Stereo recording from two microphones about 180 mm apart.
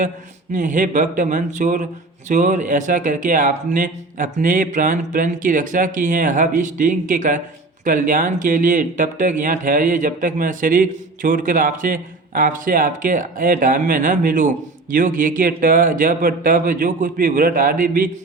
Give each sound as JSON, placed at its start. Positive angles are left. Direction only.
{"t": 0.5, "sound": "speech", "side_deg": -45}